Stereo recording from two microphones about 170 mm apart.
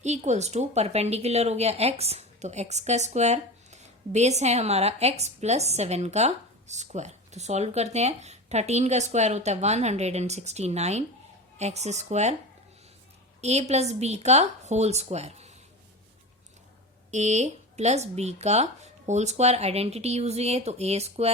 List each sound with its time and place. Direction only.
0.0 s speech: 40° right (ahead or behind)
13.4 s speech: 40° right (ahead or behind)
17.1 s speech: 40° right (ahead or behind)